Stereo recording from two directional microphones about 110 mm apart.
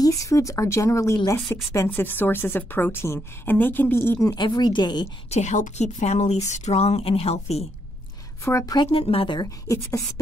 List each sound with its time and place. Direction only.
0.0 s a woman's voice: 30° left (ahead or behind)
4.4 s a woman's voice: 40° left (ahead or behind)
5.3 s a woman's voice: 90° left; by 7.6 s 70° left (ahead or behind)
8.8 s speech: 65° left (ahead or behind)
9.4 s a woman's voice: 30° left (ahead or behind)